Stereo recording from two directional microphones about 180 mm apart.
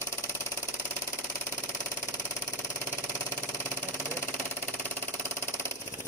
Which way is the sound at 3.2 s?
15° left (ahead or behind).